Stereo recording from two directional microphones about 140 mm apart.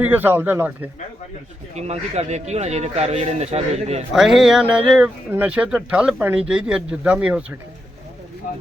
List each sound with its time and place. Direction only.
0.0 s speech: 15° right (ahead or behind)
1.7 s speech: 50° right (ahead or behind)
4.1 s speech: centre (ahead or behind)